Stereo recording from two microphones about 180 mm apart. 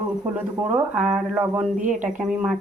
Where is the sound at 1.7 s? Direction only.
45° right (ahead or behind).